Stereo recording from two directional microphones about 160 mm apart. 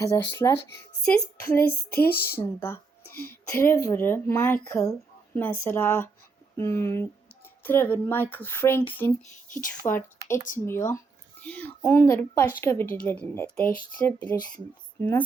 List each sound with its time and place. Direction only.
0.0 s speech: 20° left (ahead or behind)
1.0 s speech: 5° left (ahead or behind)
1.5 s a sound: 75° left (ahead or behind)
2.2 s speech: 15° left (ahead or behind)
3.8 s speech: 15° left (ahead or behind)
10.3 s speech: 55° left (ahead or behind)
10.8 s speech: 10° left (ahead or behind)